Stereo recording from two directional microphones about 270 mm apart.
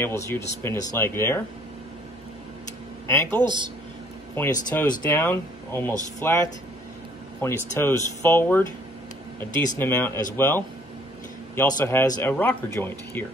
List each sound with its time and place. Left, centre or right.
0.0 s speech: centre
3.1 s speech: centre
3.4 s speech: centre
4.4 s speech: centre
9.8 s speech: centre